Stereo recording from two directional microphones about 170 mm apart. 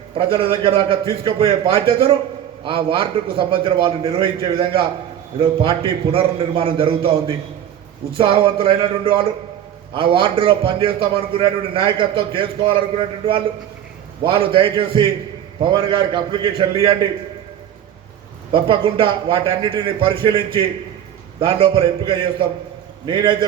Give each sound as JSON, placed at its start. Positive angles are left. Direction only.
{"t": 0.2, "sound": "a man's voice", "side_deg": -35}
{"t": 14.3, "sound": "a man's voice", "side_deg": -30}
{"t": 18.5, "sound": "a man's voice", "side_deg": -30}